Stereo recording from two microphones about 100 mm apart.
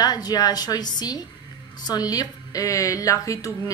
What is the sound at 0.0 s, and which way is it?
A woman's voice, 40° left (ahead or behind).